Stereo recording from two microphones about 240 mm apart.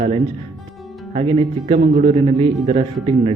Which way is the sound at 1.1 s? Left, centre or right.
Right.